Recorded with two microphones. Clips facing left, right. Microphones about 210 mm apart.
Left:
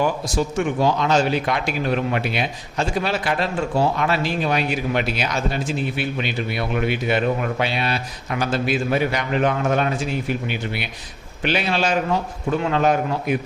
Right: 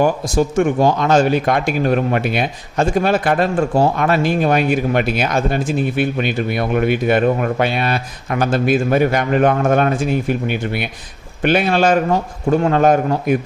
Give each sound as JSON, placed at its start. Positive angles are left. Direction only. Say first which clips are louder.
{"t": 0.0, "sound": "speech", "louder": "right 6 dB", "side_deg": -50}